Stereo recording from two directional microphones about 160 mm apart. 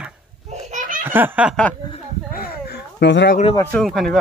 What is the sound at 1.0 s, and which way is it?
Snicker, 15° right (ahead or behind).